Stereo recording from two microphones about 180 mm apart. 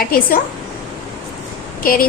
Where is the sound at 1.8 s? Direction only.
55° left (ahead or behind).